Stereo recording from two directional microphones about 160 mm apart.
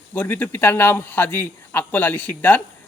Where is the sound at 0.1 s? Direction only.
10° left (ahead or behind).